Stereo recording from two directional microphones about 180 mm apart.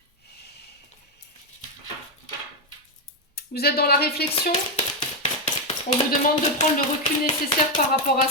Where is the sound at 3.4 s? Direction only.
60° left (ahead or behind).